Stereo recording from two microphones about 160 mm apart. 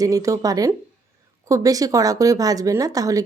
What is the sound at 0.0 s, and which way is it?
Speech, 20° right (ahead or behind).